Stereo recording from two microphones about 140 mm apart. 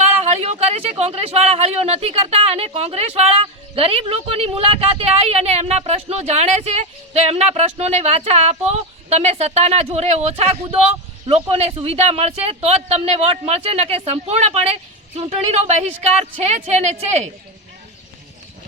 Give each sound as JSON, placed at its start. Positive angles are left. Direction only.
{"t": 0.2, "sound": "speech", "side_deg": -50}